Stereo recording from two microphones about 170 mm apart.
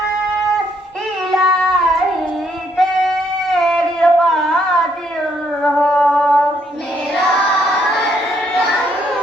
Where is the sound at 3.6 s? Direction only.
Centre (ahead or behind).